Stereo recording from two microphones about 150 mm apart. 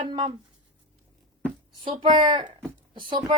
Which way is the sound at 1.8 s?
35° right (ahead or behind).